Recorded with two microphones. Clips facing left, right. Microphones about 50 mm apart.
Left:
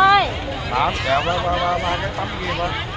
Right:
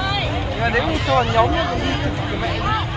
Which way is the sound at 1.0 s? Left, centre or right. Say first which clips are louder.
Right 1 dB; centre.